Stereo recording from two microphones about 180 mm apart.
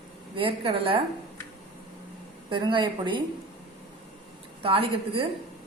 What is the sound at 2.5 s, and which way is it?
Speech, 25° right (ahead or behind).